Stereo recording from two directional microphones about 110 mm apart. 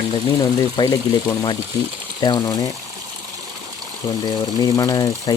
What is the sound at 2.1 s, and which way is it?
Speech, 45° left (ahead or behind).